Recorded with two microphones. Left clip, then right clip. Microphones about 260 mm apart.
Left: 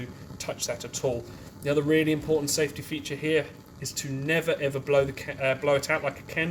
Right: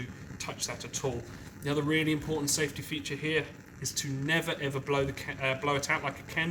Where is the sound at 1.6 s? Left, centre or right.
Centre.